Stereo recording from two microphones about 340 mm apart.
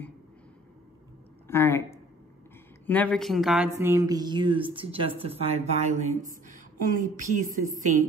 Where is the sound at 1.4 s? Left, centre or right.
Centre.